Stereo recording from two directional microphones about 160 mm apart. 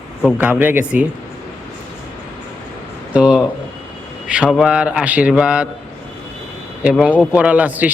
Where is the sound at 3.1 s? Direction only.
5° right (ahead or behind).